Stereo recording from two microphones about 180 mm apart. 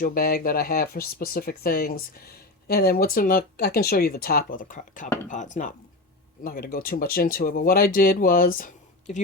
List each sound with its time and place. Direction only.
0.0 s speech: 55° left (ahead or behind)
6.4 s speech: 55° left (ahead or behind)